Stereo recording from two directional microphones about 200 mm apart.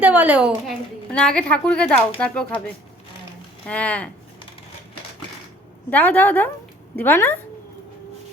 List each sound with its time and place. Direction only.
0.0 s a woman's voice: 5° right (ahead or behind)
1.1 s a woman's voice: 5° left (ahead or behind)
3.7 s a woman's voice: 5° left (ahead or behind)
5.9 s a woman's voice: 10° left (ahead or behind)